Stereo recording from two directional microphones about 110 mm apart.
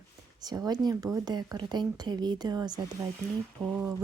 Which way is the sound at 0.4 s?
35° right (ahead or behind).